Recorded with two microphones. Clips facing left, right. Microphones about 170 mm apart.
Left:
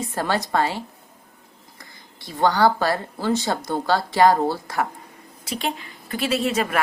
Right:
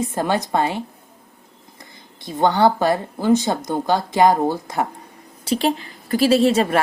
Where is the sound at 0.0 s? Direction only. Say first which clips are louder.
Right 3 dB; 20° right (ahead or behind).